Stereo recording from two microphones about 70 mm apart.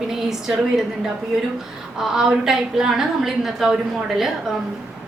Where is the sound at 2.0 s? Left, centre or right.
Centre.